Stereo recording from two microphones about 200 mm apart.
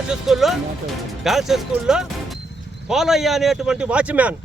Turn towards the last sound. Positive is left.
turn(degrees=-5)  # may be behind; listen again after turning